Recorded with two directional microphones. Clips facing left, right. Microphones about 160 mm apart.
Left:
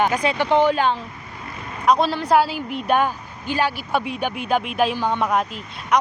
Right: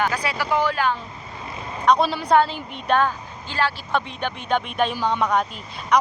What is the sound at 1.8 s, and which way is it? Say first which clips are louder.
A woman's voice: left 1 dB; centre (ahead or behind).